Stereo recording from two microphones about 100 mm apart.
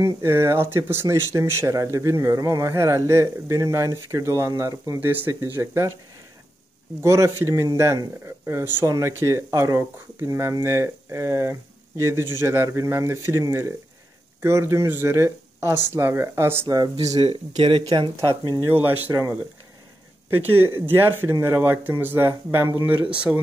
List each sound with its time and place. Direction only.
0.0 s speech: 25° right (ahead or behind)
7.0 s speech: 25° right (ahead or behind)
16.6 s speech: 40° right (ahead or behind)
17.2 s speech: 85° right
17.8 s speech: 50° right (ahead or behind)
18.1 s speech: 30° right (ahead or behind)
20.2 s speech: 20° right (ahead or behind)
23.3 s speech: centre (ahead or behind)